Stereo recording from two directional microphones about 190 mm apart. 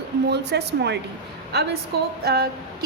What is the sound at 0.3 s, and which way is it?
Speech, 65° right (ahead or behind).